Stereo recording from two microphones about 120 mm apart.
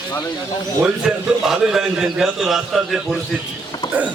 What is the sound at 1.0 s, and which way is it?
A man's voice, 5° right (ahead or behind).